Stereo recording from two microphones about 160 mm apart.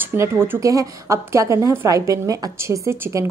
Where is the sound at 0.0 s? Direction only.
15° right (ahead or behind).